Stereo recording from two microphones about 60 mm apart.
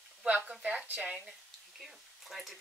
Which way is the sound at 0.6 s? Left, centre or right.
Right.